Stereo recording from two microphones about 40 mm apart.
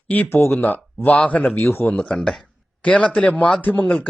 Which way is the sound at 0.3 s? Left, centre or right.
Left.